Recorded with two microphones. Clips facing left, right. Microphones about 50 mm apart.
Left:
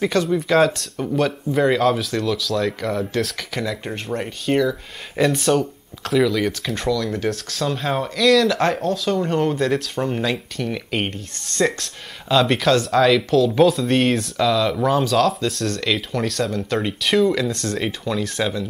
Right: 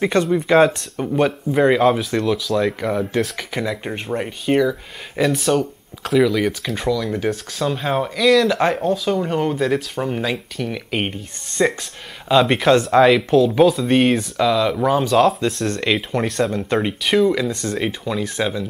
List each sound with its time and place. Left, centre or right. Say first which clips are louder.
0.0 s speech: right 2 dB; right
0.3 s speech: right 3 dB; centre
13.5 s speech: right 1 dB; centre
15.6 s speech: right 2 dB; right
17.0 s speech: even; centre